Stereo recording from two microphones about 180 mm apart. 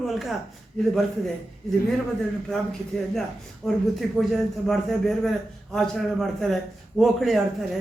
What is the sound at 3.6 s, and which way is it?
Speech, centre (ahead or behind).